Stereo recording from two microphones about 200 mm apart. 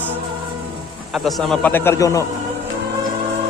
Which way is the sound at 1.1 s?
Centre (ahead or behind).